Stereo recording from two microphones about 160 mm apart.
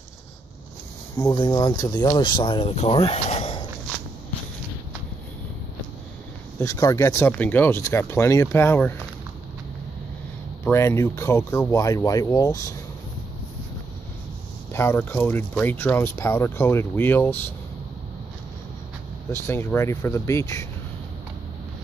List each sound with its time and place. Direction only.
1.1 s speech: 25° left (ahead or behind)
6.6 s speech: 20° left (ahead or behind)
10.6 s speech: 15° left (ahead or behind)
14.7 s speech: 15° left (ahead or behind)
19.3 s speech: 15° left (ahead or behind)